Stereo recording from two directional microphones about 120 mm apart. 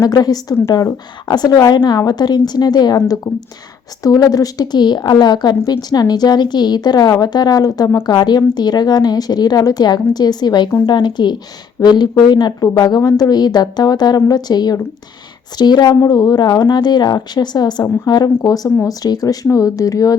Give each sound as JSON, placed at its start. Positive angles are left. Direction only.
{"t": 0.0, "sound": "a woman's voice", "side_deg": 30}